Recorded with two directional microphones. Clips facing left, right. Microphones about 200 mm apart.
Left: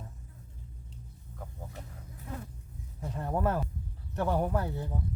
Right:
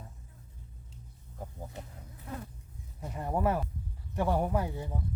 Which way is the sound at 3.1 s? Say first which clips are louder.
Even; 10° right (ahead or behind).